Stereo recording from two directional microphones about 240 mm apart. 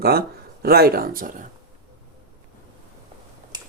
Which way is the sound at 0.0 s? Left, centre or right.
Right.